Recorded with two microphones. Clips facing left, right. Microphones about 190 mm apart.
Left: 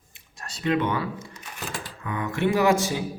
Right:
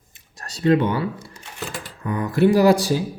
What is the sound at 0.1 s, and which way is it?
Camera, 40° right (ahead or behind).